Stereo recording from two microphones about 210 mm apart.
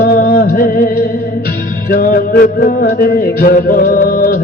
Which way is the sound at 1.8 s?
40° left (ahead or behind).